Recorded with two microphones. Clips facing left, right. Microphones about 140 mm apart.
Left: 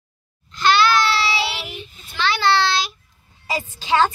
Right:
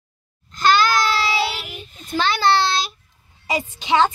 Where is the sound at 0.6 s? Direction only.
45° right (ahead or behind).